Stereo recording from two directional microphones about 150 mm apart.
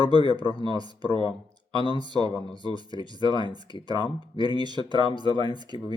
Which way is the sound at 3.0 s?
30° right (ahead or behind).